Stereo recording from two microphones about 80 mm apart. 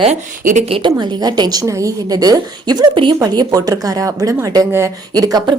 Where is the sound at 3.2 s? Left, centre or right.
Right.